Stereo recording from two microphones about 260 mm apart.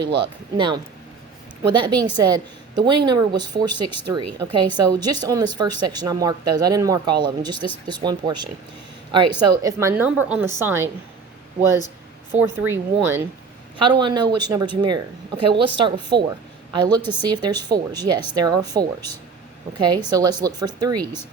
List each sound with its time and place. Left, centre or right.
0.2 s a woman's voice: centre
12.6 s a woman's voice: centre